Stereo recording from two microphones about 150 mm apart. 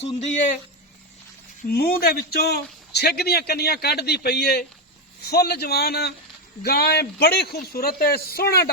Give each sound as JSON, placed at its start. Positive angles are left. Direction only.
{"t": 0.0, "sound": "speech", "side_deg": 50}
{"t": 1.6, "sound": "a man's voice", "side_deg": 85}